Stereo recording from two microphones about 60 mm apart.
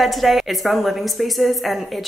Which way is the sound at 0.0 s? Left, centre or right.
Centre.